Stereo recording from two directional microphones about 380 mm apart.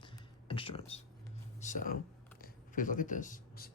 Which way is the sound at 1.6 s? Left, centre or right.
Centre.